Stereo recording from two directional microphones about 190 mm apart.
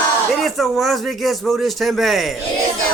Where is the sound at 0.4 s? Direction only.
Centre (ahead or behind).